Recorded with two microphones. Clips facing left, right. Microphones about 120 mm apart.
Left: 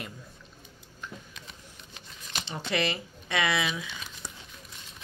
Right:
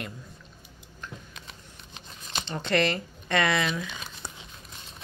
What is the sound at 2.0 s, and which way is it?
Shuffling cards, 25° right (ahead or behind).